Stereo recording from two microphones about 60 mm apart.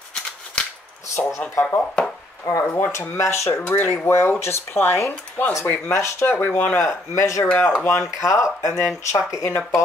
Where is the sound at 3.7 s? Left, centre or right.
Left.